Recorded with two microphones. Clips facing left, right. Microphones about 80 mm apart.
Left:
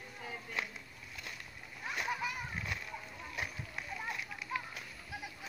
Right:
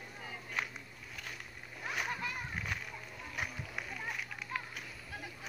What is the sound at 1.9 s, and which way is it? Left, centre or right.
Splash, centre.